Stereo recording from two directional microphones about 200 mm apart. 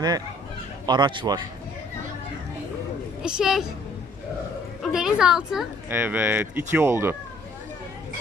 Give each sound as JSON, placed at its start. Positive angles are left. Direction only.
{"t": 0.9, "sound": "speech", "side_deg": -25}
{"t": 3.2, "sound": "a woman's voice", "side_deg": -5}
{"t": 4.8, "sound": "speech", "side_deg": -5}